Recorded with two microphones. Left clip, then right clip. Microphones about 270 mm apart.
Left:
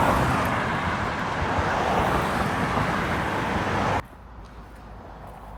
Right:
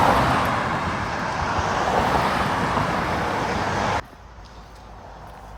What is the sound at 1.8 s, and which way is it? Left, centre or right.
Vehicle, right.